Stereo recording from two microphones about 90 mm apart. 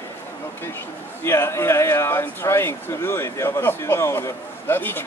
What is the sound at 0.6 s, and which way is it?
Speech, 25° left (ahead or behind).